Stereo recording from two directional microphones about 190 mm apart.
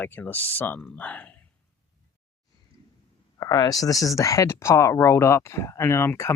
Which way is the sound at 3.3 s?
20° left (ahead or behind).